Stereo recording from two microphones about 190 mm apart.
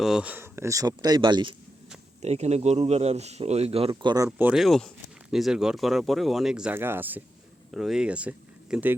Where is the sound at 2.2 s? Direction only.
35° right (ahead or behind).